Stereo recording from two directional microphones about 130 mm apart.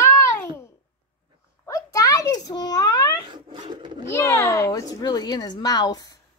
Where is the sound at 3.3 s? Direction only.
35° right (ahead or behind).